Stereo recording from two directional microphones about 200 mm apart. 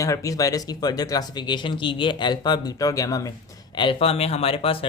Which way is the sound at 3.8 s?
25° left (ahead or behind).